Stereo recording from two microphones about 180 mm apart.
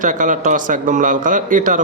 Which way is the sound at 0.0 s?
45° right (ahead or behind).